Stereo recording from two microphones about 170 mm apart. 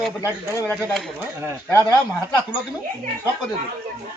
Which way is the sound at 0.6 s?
Centre (ahead or behind).